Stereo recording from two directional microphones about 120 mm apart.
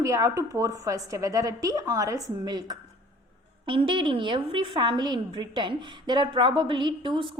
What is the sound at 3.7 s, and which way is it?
A woman's voice, 45° right (ahead or behind).